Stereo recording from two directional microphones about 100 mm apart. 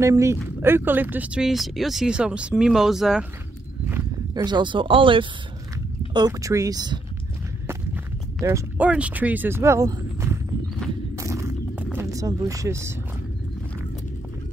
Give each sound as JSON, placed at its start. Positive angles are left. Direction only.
{"t": 0.0, "sound": "speech", "side_deg": -30}
{"t": 4.5, "sound": "speech", "side_deg": -50}
{"t": 6.1, "sound": "speech", "side_deg": -40}
{"t": 7.6, "sound": "walk", "side_deg": -25}
{"t": 8.7, "sound": "speech", "side_deg": -15}
{"t": 11.1, "sound": "a sound", "side_deg": -30}
{"t": 12.1, "sound": "speech", "side_deg": -35}